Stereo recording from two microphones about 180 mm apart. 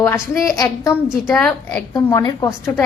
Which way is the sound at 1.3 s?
5° left (ahead or behind).